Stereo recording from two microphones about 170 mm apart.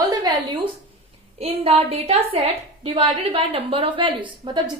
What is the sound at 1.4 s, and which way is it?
A woman's voice, 35° right (ahead or behind).